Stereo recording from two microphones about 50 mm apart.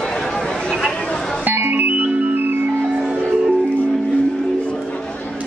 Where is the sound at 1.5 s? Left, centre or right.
Right.